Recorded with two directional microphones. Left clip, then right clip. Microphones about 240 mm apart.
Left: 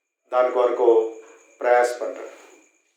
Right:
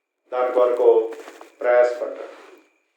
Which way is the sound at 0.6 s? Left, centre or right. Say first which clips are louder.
Right 4 dB; left.